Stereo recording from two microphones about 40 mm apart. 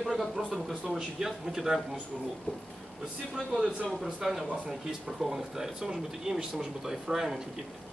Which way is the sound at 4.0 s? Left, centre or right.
Centre.